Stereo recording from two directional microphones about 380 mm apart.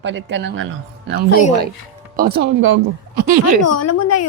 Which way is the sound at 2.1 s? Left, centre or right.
Right.